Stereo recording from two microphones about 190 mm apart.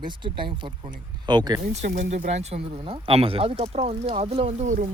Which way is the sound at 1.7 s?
40° right (ahead or behind).